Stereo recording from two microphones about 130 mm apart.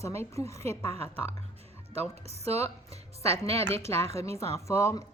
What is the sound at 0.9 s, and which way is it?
Speech, 50° right (ahead or behind).